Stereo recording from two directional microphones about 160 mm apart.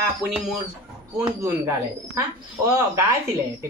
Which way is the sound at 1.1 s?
20° right (ahead or behind).